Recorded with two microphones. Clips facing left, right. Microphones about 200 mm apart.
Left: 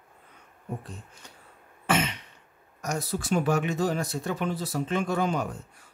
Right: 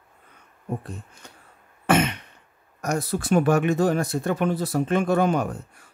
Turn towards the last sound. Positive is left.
turn(degrees=-55)  # may be behind; listen again after turning